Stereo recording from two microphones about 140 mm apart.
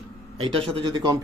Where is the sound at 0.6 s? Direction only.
35° right (ahead or behind).